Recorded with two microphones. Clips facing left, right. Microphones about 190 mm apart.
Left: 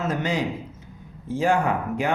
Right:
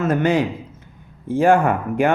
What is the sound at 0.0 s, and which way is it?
A man's voice, 55° right (ahead or behind).